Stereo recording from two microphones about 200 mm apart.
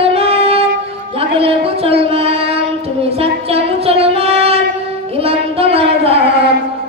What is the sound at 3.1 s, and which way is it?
Child singing, 30° right (ahead or behind).